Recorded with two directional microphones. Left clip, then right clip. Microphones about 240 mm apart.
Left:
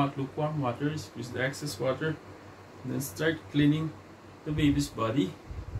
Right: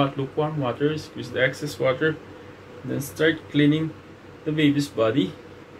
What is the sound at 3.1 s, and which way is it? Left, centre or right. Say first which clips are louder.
Speech: right 8 dB; centre.